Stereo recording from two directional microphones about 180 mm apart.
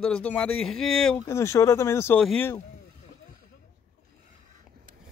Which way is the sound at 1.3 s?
15° left (ahead or behind).